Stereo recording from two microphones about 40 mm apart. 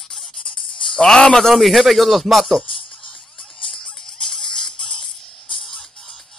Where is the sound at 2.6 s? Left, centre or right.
Centre.